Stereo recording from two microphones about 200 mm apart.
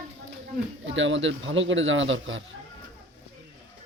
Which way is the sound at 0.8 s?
70° right (ahead or behind).